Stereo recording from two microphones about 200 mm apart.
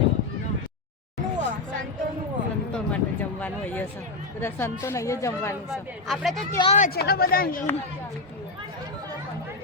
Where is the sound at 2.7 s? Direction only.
5° left (ahead or behind).